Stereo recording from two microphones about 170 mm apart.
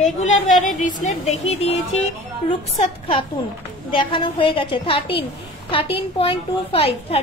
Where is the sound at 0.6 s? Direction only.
50° left (ahead or behind).